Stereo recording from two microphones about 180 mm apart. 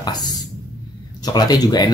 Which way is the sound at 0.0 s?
20° left (ahead or behind).